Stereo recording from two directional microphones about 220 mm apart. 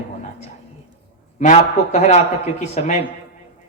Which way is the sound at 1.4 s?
35° left (ahead or behind).